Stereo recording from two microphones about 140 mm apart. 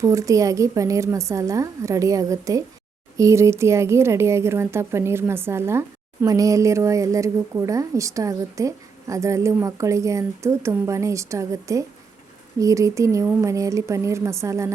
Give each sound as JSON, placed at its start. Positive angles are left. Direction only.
{"t": 0.0, "sound": "a woman's voice", "side_deg": -25}